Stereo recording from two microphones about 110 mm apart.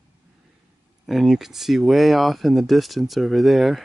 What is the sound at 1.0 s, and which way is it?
Speech, centre (ahead or behind).